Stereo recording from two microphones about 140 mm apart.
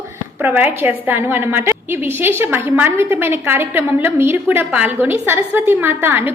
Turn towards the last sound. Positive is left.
turn(degrees=-15)  # may be behind; listen again after turning